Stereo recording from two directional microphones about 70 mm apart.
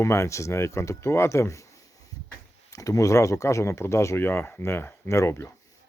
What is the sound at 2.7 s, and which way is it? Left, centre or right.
Speech, left.